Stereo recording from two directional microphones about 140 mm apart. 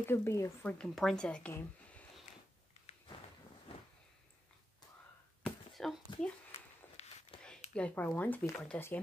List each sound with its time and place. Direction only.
0.0 s a woman's voice: 15° left (ahead or behind)
5.4 s a sound: centre (ahead or behind)
6.5 s walk: 45° left (ahead or behind)
7.7 s a woman's voice: 10° left (ahead or behind)